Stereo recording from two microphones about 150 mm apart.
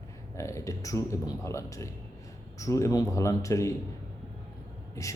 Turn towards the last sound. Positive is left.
turn(degrees=20)  # may be behind; listen again after turning